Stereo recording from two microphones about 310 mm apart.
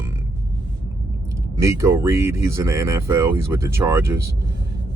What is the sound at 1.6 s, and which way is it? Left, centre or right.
Speech, centre.